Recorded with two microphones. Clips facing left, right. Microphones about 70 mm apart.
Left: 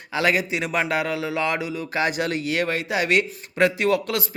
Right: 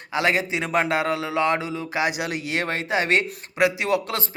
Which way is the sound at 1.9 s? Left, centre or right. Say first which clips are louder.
Left 2 dB; centre.